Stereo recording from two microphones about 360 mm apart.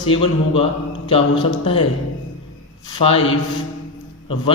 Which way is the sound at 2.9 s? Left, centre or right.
Centre.